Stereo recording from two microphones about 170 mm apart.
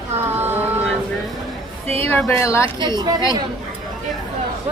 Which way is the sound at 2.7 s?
25° right (ahead or behind).